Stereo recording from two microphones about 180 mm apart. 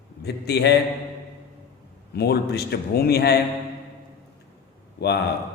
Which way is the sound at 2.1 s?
65° left (ahead or behind).